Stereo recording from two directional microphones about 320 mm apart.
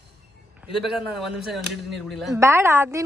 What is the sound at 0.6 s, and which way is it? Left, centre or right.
Speech, centre.